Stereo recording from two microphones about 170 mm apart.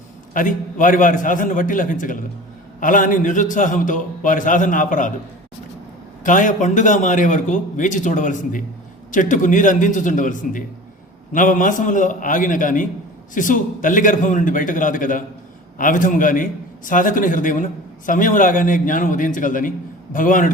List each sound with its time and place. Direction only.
0.3 s a man's voice: 50° left (ahead or behind)
6.2 s a man's voice: 50° left (ahead or behind)